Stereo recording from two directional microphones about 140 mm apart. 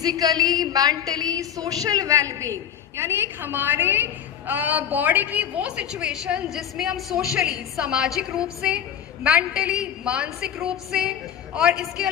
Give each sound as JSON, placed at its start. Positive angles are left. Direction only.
{"t": 0.0, "sound": "a woman's voice", "side_deg": -30}